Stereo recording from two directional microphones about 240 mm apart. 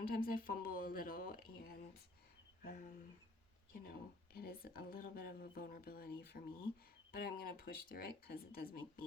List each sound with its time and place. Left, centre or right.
0.0 s speech: left